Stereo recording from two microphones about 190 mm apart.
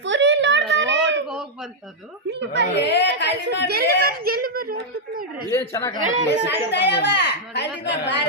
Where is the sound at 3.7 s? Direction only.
55° right (ahead or behind).